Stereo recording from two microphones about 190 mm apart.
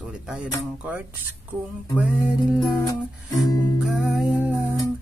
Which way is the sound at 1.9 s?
5° right (ahead or behind).